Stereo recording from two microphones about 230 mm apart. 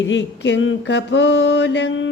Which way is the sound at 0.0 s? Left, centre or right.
Left.